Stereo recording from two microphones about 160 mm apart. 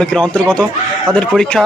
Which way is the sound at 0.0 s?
5° left (ahead or behind).